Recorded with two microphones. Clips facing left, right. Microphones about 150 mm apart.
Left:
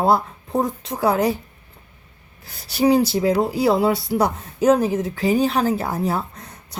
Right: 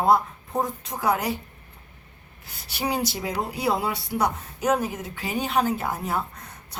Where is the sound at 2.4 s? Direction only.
40° left (ahead or behind).